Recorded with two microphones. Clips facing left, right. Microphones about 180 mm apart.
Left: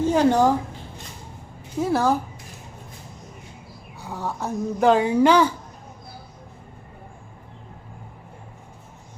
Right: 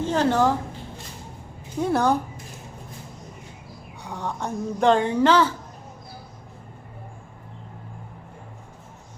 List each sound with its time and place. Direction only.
0.0 s a woman's voice: 10° left (ahead or behind)
1.8 s speech: 5° left (ahead or behind)
4.0 s speech: 5° left (ahead or behind)